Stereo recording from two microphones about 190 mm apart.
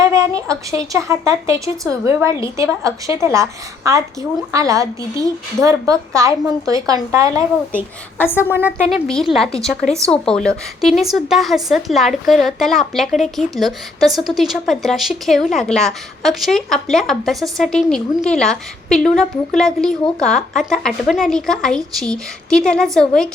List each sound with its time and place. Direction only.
0.0 s a sound: 15° right (ahead or behind)
0.7 s a woman's voice: 15° right (ahead or behind)
8.2 s a woman's voice: 10° left (ahead or behind)
8.5 s a woman's voice: 10° right (ahead or behind)